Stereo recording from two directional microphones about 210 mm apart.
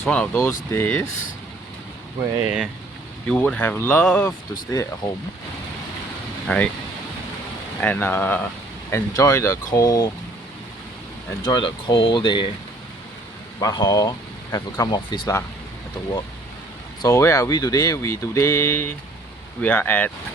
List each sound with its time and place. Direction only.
0.0 s speech: 5° left (ahead or behind)
3.2 s speech: 5° left (ahead or behind)
4.3 s speech: 15° left (ahead or behind)
6.5 s speech: 5° left (ahead or behind)
7.8 s speech: 10° left (ahead or behind)
11.4 s speech: 20° left (ahead or behind)
13.6 s speech: 20° left (ahead or behind)
17.0 s speech: 15° left (ahead or behind)